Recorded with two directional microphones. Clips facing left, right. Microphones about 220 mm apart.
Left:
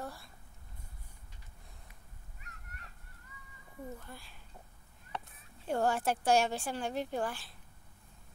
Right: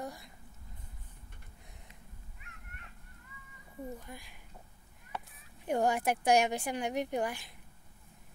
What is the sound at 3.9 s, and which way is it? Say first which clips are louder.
Speech: right 2 dB; 15° right (ahead or behind).